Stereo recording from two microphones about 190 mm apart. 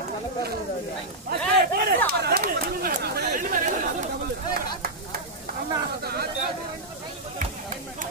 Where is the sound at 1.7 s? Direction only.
50° right (ahead or behind).